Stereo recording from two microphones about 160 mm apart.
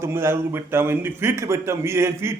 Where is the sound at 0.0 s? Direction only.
15° right (ahead or behind).